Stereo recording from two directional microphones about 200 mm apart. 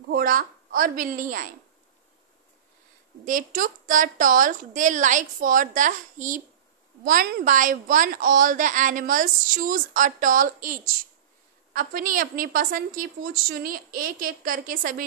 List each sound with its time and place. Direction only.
0.1 s a woman's voice: 45° right (ahead or behind)
3.3 s a woman's voice: 40° right (ahead or behind)